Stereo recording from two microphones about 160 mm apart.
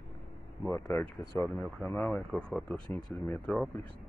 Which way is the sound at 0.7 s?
15° left (ahead or behind).